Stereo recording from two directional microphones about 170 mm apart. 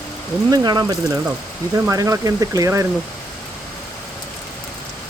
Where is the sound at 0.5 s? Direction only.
25° right (ahead or behind).